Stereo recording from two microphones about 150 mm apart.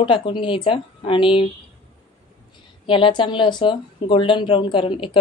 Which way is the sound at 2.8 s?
35° left (ahead or behind).